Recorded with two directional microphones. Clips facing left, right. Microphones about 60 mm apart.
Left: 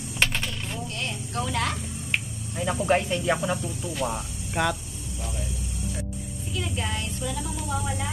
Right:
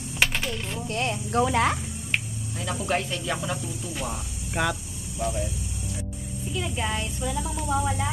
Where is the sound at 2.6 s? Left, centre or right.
Centre.